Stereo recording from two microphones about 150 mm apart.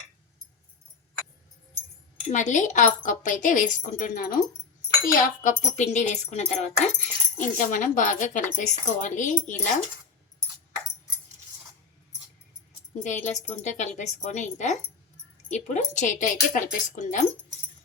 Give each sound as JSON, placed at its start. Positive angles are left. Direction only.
{"t": 2.3, "sound": "speech", "side_deg": 55}
{"t": 13.0, "sound": "speech", "side_deg": 55}